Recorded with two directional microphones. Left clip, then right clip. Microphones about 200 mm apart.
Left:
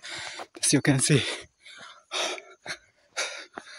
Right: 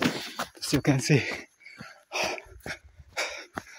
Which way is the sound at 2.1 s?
5° left (ahead or behind).